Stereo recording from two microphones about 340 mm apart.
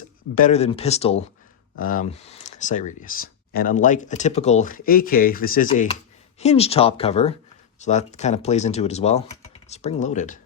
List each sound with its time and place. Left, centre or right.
0.3 s speech: left